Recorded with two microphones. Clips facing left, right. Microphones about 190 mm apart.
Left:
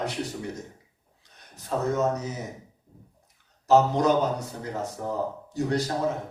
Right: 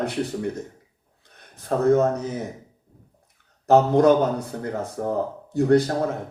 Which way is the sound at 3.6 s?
55° right (ahead or behind).